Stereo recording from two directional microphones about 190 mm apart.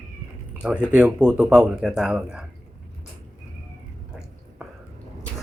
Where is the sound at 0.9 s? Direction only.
5° right (ahead or behind).